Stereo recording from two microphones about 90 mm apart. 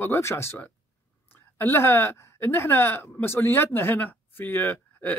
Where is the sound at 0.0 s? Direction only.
30° left (ahead or behind).